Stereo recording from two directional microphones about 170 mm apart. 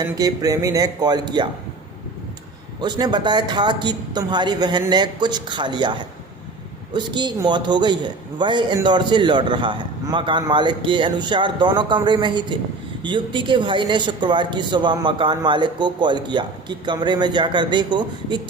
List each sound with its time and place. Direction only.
0.0 s speech: 20° right (ahead or behind)
2.8 s speech: 25° right (ahead or behind)